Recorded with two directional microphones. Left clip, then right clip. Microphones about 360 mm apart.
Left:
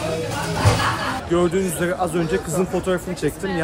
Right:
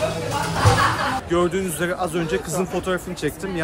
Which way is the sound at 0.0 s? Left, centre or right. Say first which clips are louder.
Right 1 dB; centre.